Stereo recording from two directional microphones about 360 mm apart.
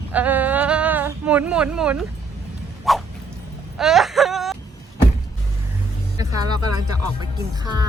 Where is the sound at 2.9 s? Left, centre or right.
Centre.